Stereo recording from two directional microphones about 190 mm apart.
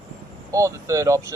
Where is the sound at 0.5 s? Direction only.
15° right (ahead or behind).